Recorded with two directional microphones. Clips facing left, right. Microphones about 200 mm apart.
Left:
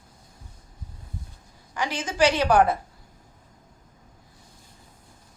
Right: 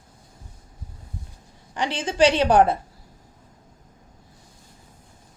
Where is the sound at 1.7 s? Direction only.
30° right (ahead or behind).